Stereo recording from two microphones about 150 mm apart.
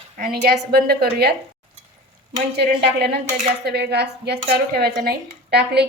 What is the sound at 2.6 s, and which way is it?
A woman's voice, 90° right.